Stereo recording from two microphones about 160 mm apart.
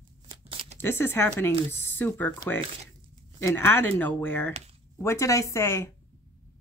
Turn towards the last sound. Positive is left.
turn(degrees=15)  # may be behind; listen again after turning